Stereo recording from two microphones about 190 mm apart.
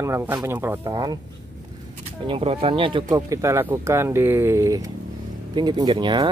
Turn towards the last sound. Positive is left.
turn(degrees=-25)  # may be behind; listen again after turning